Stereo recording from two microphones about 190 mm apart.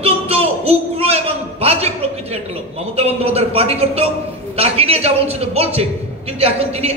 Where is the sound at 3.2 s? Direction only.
30° right (ahead or behind).